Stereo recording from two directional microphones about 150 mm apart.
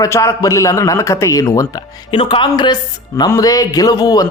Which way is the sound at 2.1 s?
35° left (ahead or behind).